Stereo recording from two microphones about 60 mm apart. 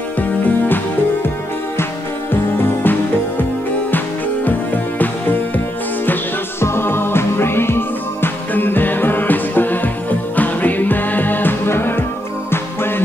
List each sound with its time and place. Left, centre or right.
4.5 s music: left
6.6 s music: left